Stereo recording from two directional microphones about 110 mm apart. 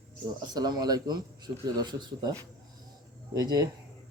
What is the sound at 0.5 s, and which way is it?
Speech, 35° right (ahead or behind).